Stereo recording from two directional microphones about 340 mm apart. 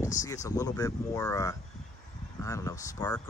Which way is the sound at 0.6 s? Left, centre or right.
Centre.